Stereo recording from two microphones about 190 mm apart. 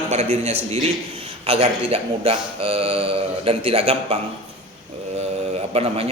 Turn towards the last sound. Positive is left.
turn(degrees=-35)  # may be behind; listen again after turning